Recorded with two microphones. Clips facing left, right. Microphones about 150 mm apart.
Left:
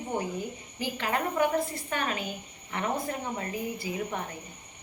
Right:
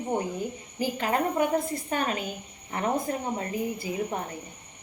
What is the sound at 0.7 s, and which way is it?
A woman's voice, 35° right (ahead or behind).